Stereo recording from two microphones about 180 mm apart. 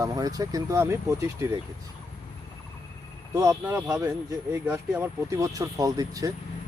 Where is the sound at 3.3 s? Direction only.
15° right (ahead or behind).